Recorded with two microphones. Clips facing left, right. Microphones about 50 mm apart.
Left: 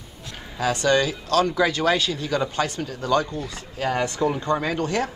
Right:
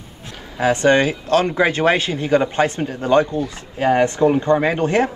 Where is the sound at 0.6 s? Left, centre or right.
Right.